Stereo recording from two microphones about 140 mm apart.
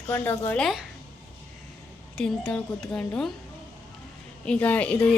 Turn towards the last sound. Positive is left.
turn(degrees=10)  # may be behind; listen again after turning